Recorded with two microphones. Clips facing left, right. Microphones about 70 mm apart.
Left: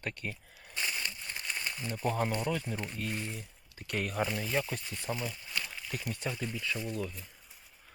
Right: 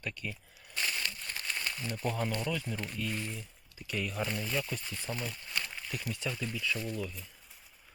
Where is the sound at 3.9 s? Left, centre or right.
Left.